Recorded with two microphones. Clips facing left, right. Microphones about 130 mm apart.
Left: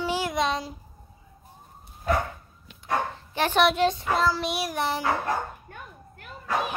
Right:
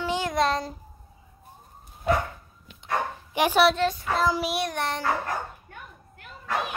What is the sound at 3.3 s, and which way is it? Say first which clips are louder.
Speech: right 2 dB; 10° right (ahead or behind).